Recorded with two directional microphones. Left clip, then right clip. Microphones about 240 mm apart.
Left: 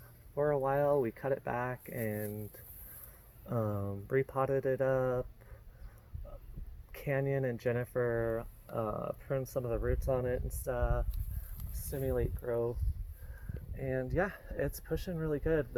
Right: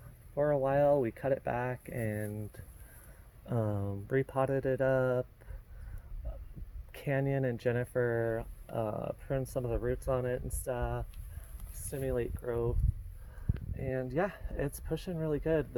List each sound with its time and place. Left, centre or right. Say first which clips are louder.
0.3 s speech: right 2 dB; right
6.9 s speech: right 1 dB; right
11.7 s speech: even; centre
13.7 s speech: even; right